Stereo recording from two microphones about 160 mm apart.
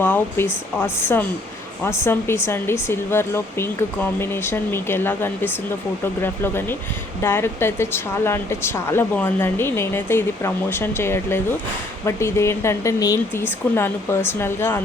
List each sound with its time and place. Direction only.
0.0 s speech: 15° left (ahead or behind)